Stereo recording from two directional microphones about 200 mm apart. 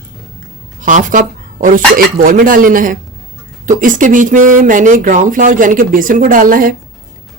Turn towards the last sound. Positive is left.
turn(degrees=-45)  # may be behind; listen again after turning